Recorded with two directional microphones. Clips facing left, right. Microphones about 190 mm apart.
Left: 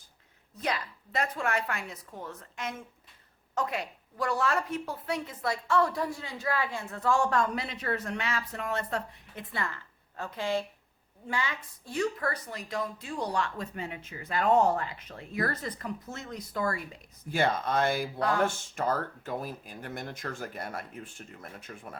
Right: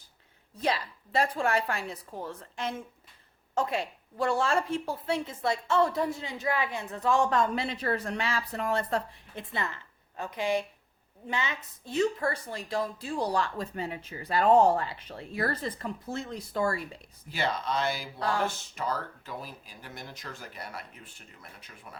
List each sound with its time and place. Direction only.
0.6 s a woman's voice: 30° right (ahead or behind)
17.3 s speech: 50° left (ahead or behind)